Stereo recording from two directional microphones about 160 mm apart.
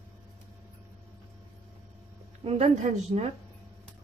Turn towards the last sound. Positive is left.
turn(degrees=-40)  # may be behind; listen again after turning